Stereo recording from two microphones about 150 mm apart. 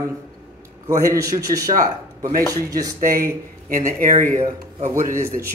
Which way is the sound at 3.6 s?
65° right (ahead or behind).